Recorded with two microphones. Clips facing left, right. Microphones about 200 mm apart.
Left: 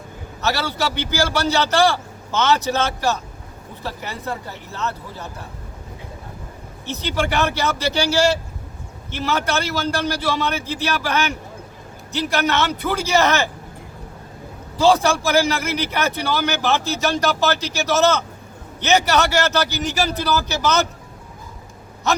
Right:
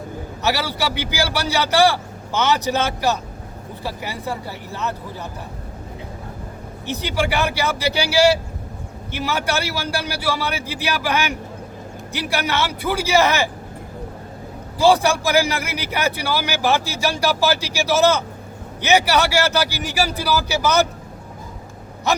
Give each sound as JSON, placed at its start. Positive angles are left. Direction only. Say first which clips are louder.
{"t": 0.4, "sound": "a man's voice", "louder": "even", "side_deg": -10}
{"t": 6.8, "sound": "a man's voice", "louder": "right 1 dB", "side_deg": -10}
{"t": 14.8, "sound": "a man's voice", "louder": "even", "side_deg": -15}